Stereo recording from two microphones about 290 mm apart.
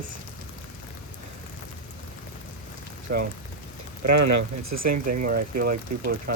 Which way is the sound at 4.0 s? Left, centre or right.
Right.